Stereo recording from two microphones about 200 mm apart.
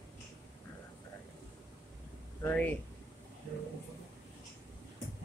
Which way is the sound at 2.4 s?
10° left (ahead or behind).